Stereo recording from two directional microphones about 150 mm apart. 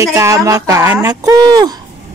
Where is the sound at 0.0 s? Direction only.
20° right (ahead or behind).